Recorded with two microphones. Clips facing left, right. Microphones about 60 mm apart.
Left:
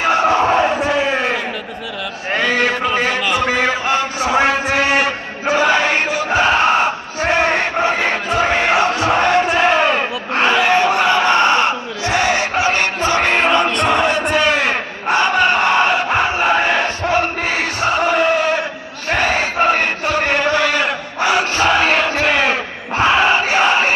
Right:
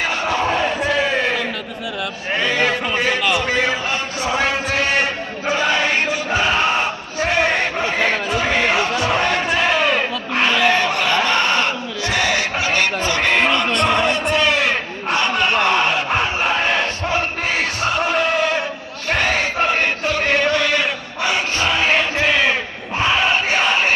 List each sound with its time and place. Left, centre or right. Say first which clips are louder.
0.0 s chant: left 6 dB; left
3.3 s a sound: left 2 dB; left
3.8 s a sound: left 5 dB; left
5.5 s crowd: left 4 dB; left
7.9 s chant: left 2 dB; left
10.4 s crowd: left 3 dB; left
13.7 s chant: left 2 dB; centre
14.3 s a sound: left 2 dB; left
16.4 s chant: left 3 dB; centre
19.1 s crowd: left 2 dB; centre
19.7 s chant: left 2 dB; left
23.0 s crowd: left 4 dB; left